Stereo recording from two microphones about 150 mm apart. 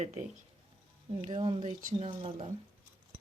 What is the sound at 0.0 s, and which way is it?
Speech, 50° right (ahead or behind).